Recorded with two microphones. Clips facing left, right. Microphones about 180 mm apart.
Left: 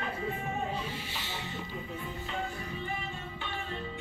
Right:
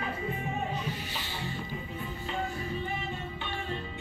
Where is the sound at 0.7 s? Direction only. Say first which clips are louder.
Right 1 dB; 25° left (ahead or behind).